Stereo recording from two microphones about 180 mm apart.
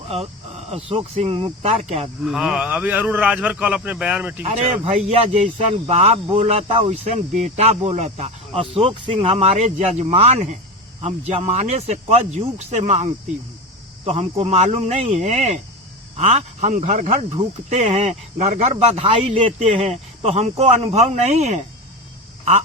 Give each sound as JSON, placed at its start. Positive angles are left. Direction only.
{"t": 0.1, "sound": "speech", "side_deg": -35}
{"t": 2.2, "sound": "a man's voice", "side_deg": -5}
{"t": 4.4, "sound": "speech", "side_deg": -35}